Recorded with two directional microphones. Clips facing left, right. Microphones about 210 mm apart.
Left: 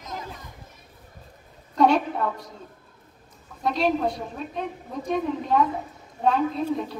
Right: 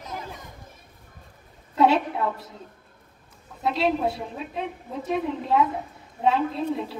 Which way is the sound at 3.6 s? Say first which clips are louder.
Even; 5° right (ahead or behind).